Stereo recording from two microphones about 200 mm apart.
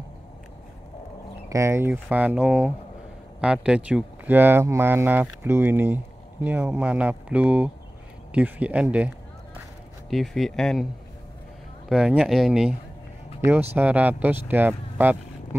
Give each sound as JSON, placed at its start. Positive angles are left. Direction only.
{"t": 1.5, "sound": "speech", "side_deg": -15}
{"t": 11.9, "sound": "speech", "side_deg": -5}